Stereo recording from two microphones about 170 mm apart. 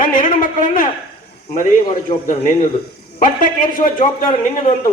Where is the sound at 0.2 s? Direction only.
50° left (ahead or behind).